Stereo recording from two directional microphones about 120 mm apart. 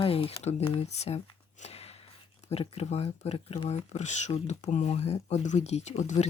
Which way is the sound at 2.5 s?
55° left (ahead or behind).